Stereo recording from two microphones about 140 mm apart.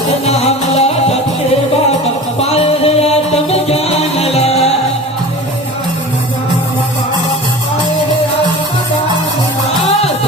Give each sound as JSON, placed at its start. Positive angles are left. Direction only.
{"t": 0.3, "sound": "music", "side_deg": 50}
{"t": 2.4, "sound": "music", "side_deg": 45}